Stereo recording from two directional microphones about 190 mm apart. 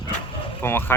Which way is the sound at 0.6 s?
10° left (ahead or behind).